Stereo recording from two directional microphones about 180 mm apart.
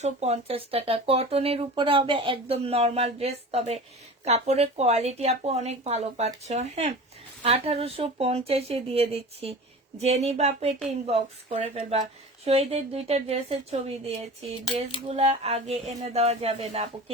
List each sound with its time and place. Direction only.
0.0 s speech: 35° right (ahead or behind)